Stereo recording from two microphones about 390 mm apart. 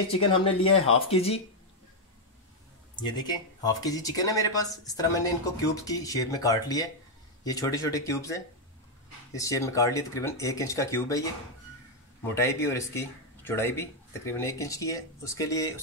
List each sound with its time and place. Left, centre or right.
0.5 s speech: left
0.9 s speech: centre
3.0 s speech: centre
12.4 s speech: centre